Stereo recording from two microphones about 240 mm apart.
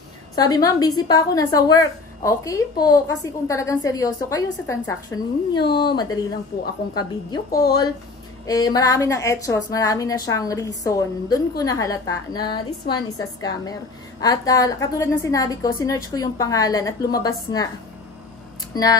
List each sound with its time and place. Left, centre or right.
0.4 s a woman's voice: centre